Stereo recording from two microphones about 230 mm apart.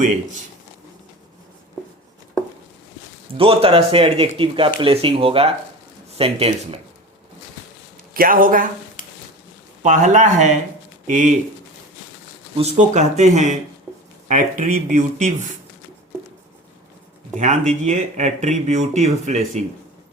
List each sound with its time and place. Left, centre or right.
3.3 s speech: right
8.1 s speech: right
9.8 s speech: right
12.5 s speech: right
17.3 s speech: right